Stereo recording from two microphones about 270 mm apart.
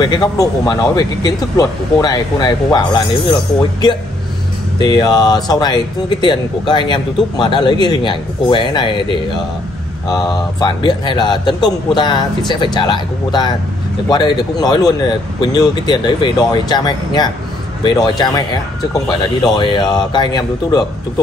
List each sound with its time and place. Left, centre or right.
0.0 s speech: centre
4.7 s speech: centre